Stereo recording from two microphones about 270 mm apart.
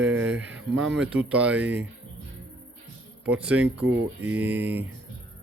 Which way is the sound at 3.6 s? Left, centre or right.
Right.